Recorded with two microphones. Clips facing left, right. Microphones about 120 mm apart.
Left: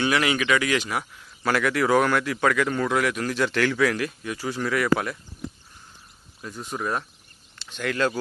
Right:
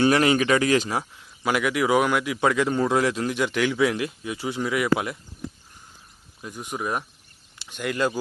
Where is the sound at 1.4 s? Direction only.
15° right (ahead or behind).